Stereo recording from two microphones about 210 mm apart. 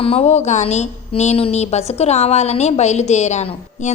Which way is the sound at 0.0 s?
30° left (ahead or behind).